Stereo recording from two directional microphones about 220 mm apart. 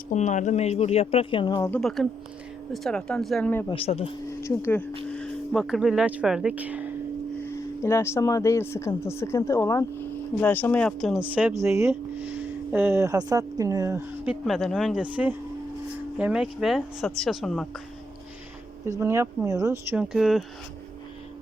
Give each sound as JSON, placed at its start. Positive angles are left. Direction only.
{"t": 0.1, "sound": "speech", "side_deg": 35}
{"t": 1.8, "sound": "speech", "side_deg": 0}
{"t": 3.7, "sound": "speech", "side_deg": 25}
{"t": 4.3, "sound": "speech", "side_deg": 15}
{"t": 7.4, "sound": "speech", "side_deg": 10}
{"t": 18.9, "sound": "speech", "side_deg": -15}